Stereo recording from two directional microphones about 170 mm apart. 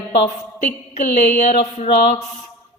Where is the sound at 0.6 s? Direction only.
40° left (ahead or behind).